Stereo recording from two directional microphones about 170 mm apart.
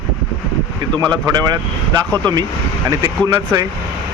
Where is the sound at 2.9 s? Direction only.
20° right (ahead or behind).